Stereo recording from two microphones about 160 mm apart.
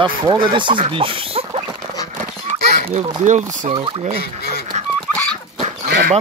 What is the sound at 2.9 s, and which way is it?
Speech, 50° right (ahead or behind).